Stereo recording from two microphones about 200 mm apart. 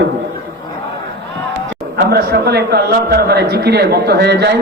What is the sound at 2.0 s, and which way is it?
A man's voice, 55° right (ahead or behind).